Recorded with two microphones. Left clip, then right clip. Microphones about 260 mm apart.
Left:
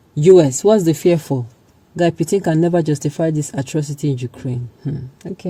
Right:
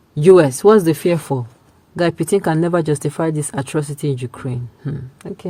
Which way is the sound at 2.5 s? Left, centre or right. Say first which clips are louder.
Left 1 dB; right.